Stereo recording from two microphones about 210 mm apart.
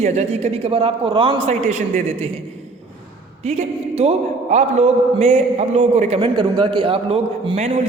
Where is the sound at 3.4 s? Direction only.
30° right (ahead or behind).